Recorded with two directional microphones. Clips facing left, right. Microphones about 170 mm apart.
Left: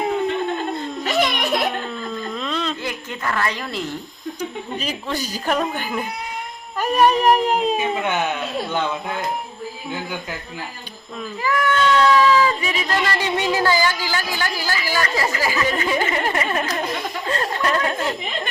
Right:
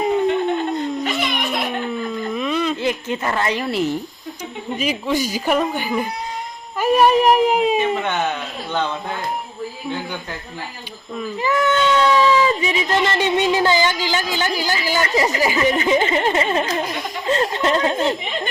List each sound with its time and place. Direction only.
1.0 s crying: 40° left (ahead or behind)
1.9 s a sound: 10° right (ahead or behind)
4.8 s speech: 10° right (ahead or behind)
7.8 s speech: 5° left (ahead or behind)
11.4 s speech: 25° right (ahead or behind)